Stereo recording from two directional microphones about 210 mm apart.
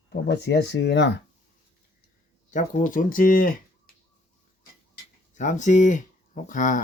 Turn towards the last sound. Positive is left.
turn(degrees=40)  # may be behind; listen again after turning